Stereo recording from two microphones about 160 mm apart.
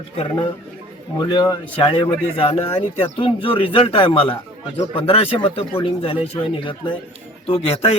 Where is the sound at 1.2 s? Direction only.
30° left (ahead or behind).